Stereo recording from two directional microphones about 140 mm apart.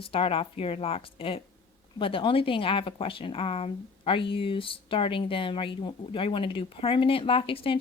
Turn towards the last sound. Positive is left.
turn(degrees=40)  # may be behind; listen again after turning